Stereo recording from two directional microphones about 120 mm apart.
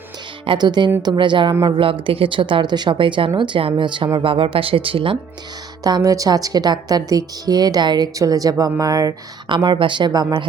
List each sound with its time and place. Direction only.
0.4 s a woman's voice: 40° right (ahead or behind)
5.8 s a woman's voice: 30° right (ahead or behind)
9.6 s a woman's voice: 40° right (ahead or behind)